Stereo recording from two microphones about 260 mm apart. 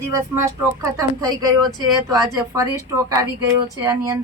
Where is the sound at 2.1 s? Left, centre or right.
Centre.